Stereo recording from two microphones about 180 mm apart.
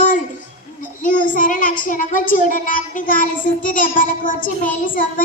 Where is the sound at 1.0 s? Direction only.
45° left (ahead or behind).